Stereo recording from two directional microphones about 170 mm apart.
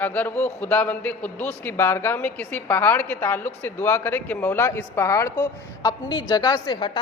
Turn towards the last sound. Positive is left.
turn(degrees=25)  # may be behind; listen again after turning